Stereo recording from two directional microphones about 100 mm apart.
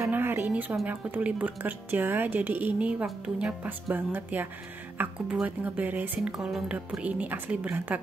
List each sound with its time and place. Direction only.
0.1 s a sound: 20° right (ahead or behind)
0.8 s speech: 15° right (ahead or behind)
3.9 s speech: 20° right (ahead or behind)